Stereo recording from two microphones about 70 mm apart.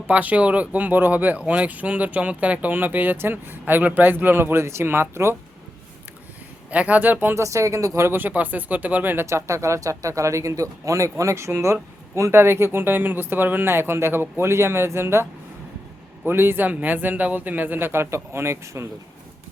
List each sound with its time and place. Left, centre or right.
0.1 s speech: right
6.7 s speech: centre
7.3 s speech: right
9.2 s speech: right
12.3 s speech: right